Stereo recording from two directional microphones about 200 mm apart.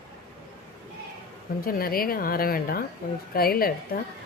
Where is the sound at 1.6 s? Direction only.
45° left (ahead or behind).